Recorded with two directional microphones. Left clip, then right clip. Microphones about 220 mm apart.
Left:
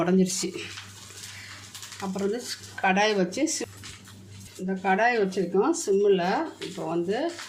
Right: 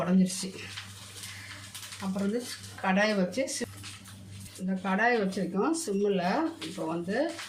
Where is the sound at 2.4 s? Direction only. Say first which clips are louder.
Left 6 dB; 45° left (ahead or behind).